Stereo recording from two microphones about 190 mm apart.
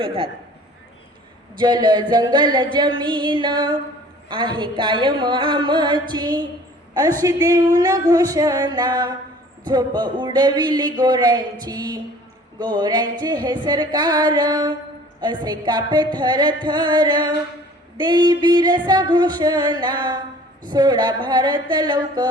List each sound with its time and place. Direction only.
0.0 s speech: 25° right (ahead or behind)
1.5 s speech: 25° right (ahead or behind)